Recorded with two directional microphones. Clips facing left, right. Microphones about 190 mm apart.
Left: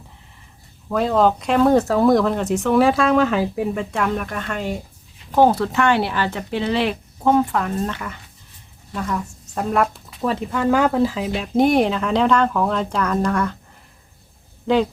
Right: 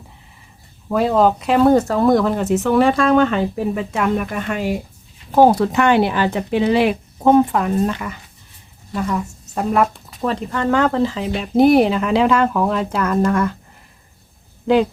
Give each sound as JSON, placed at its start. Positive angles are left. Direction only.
{"t": 0.9, "sound": "speech", "side_deg": -5}
{"t": 9.0, "sound": "speech", "side_deg": -10}